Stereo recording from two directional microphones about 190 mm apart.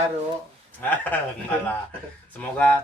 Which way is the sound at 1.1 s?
10° left (ahead or behind).